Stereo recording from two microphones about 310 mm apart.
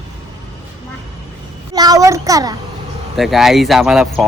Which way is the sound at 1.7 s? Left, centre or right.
Centre.